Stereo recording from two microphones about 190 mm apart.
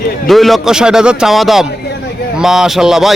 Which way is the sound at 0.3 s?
Centre (ahead or behind).